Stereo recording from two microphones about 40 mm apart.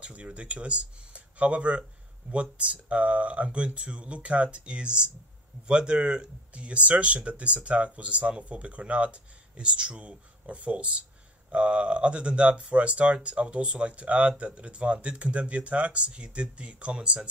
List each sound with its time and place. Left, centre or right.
0.0 s speech: right
6.5 s speech: right